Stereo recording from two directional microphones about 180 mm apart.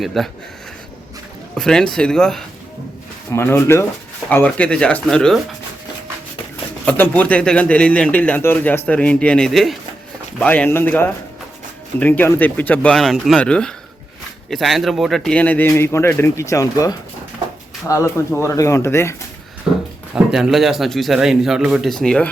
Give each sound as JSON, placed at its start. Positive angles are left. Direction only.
{"t": 0.0, "sound": "a man's voice", "side_deg": 0}
{"t": 1.5, "sound": "a man's voice", "side_deg": 5}
{"t": 6.8, "sound": "speech", "side_deg": 10}
{"t": 20.1, "sound": "a man's voice", "side_deg": -5}